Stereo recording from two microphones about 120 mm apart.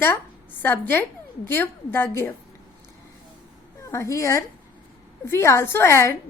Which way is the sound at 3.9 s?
25° left (ahead or behind).